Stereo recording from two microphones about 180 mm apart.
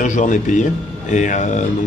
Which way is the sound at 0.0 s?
45° left (ahead or behind).